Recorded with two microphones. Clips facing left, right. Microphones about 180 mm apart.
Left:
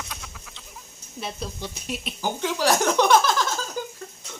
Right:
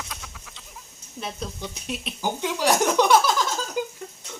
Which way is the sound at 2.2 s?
15° right (ahead or behind).